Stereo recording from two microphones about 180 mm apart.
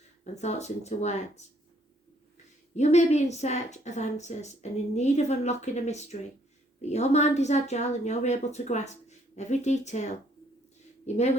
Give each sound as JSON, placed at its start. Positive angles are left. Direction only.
{"t": 0.4, "sound": "a woman's voice", "side_deg": 40}
{"t": 2.7, "sound": "a woman's voice", "side_deg": 40}